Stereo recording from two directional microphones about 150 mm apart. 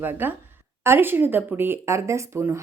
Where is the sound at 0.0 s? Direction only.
15° right (ahead or behind).